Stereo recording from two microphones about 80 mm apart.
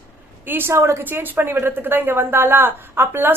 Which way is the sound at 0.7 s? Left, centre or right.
Right.